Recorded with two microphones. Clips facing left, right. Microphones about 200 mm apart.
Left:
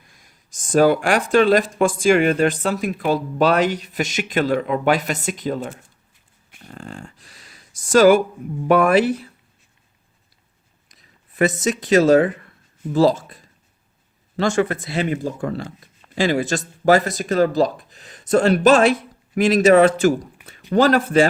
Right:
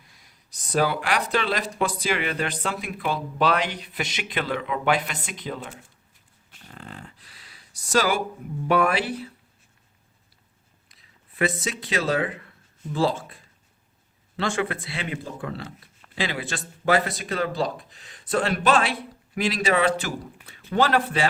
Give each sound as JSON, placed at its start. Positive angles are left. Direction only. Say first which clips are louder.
{"t": 0.1, "sound": "speech", "louder": "left 3 dB", "side_deg": 50}
{"t": 6.7, "sound": "a sound", "louder": "left 6 dB", "side_deg": 45}
{"t": 8.6, "sound": "speech", "louder": "left 7 dB", "side_deg": 50}
{"t": 10.8, "sound": "speech", "louder": "left 4 dB", "side_deg": 45}